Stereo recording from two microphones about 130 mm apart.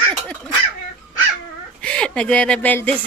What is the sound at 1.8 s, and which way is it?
Speech, 10° left (ahead or behind).